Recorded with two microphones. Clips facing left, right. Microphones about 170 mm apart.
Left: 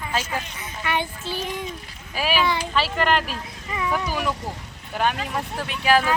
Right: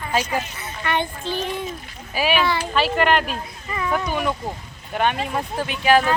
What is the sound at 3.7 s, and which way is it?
Speech, 10° left (ahead or behind).